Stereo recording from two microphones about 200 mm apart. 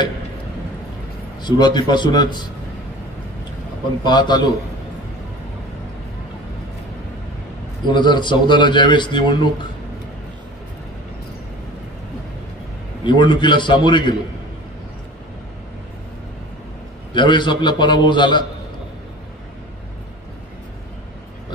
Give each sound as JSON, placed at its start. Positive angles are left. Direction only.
{"t": 1.4, "sound": "speech", "side_deg": 20}
{"t": 4.0, "sound": "speech", "side_deg": 20}
{"t": 7.9, "sound": "speech", "side_deg": 20}
{"t": 13.0, "sound": "speech", "side_deg": 25}
{"t": 17.1, "sound": "speech", "side_deg": 25}